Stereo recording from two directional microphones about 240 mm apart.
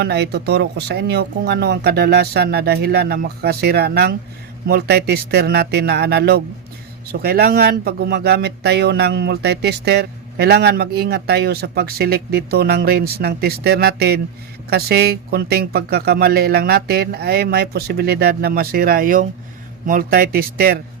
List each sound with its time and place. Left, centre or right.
0.0 s speech: right